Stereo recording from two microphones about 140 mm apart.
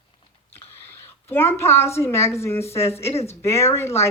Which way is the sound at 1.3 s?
15° left (ahead or behind).